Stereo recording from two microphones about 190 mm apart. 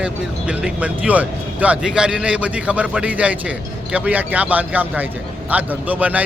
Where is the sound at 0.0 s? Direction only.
5° right (ahead or behind).